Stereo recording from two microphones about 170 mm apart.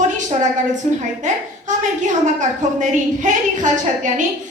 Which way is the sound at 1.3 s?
45° right (ahead or behind).